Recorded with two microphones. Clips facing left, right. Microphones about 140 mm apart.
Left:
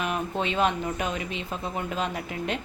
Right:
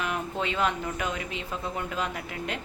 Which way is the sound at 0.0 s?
20° left (ahead or behind).